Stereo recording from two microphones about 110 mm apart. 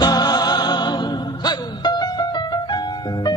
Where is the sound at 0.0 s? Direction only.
40° left (ahead or behind).